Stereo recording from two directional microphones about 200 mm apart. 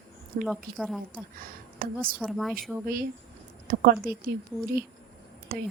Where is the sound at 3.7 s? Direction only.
45° right (ahead or behind).